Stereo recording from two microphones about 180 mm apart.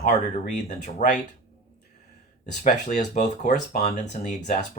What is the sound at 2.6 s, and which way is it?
Speech, 45° left (ahead or behind).